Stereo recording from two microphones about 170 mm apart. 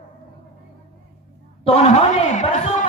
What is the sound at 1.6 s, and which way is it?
A man's voice, 40° left (ahead or behind).